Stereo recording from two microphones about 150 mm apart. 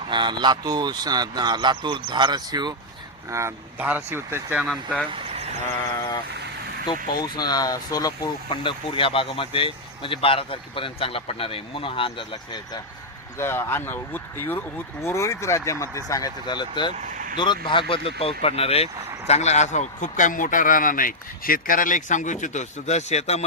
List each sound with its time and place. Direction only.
0.1 s speech: 30° right (ahead or behind); by 4.6 s 15° right (ahead or behind)
4.6 s speech: 5° right (ahead or behind)
5.1 s vehicle: 45° right (ahead or behind)
7.2 s speech: 25° left (ahead or behind)
13.4 s speech: 15° left (ahead or behind); by 23.5 s 45° left (ahead or behind)